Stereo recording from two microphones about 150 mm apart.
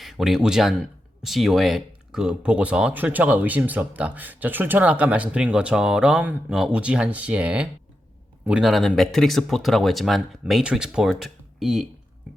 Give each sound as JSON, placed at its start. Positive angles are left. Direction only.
{"t": 0.0, "sound": "speech", "side_deg": 0}